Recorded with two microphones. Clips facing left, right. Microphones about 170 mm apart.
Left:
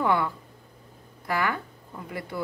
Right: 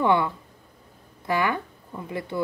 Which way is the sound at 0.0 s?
25° right (ahead or behind).